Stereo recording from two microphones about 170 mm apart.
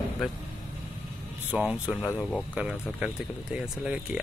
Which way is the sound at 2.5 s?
5° right (ahead or behind).